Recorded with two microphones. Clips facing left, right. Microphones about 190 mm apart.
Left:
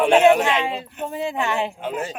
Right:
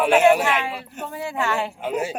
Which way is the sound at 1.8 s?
10° right (ahead or behind).